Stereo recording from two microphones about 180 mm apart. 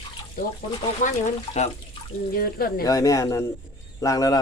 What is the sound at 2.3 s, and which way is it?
Speech, 55° left (ahead or behind).